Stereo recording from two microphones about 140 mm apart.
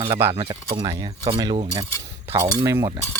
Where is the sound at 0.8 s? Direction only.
20° right (ahead or behind).